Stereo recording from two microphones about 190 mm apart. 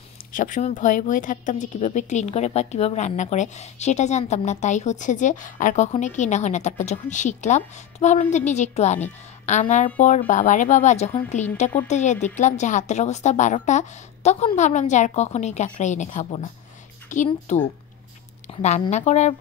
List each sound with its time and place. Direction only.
0.3 s speech: 45° left (ahead or behind)